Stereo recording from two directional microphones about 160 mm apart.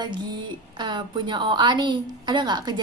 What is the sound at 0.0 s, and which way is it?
A woman's voice, 30° right (ahead or behind).